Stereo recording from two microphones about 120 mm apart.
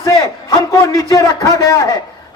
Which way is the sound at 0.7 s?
30° left (ahead or behind).